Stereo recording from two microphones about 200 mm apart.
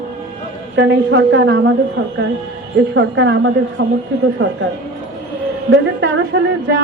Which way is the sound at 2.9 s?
65° right (ahead or behind).